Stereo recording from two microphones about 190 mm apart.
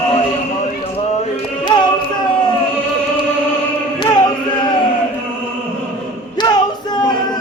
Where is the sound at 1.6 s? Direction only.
25° left (ahead or behind).